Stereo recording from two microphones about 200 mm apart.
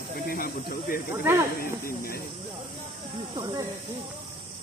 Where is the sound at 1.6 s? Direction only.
45° left (ahead or behind).